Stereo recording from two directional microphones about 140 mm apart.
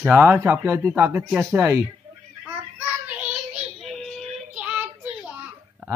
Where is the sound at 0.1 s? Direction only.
15° right (ahead or behind).